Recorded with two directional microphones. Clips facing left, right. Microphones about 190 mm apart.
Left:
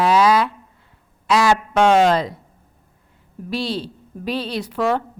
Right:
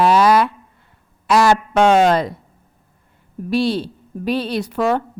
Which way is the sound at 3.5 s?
55° right (ahead or behind).